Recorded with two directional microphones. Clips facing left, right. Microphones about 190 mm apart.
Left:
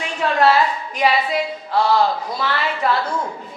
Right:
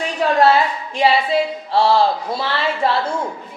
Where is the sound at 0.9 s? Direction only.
30° right (ahead or behind).